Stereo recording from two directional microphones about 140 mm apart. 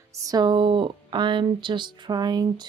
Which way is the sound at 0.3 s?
30° right (ahead or behind).